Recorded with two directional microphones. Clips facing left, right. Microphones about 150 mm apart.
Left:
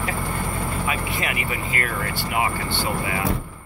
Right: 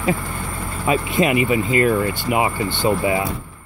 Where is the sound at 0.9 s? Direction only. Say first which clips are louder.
Right 9 dB; 25° right (ahead or behind).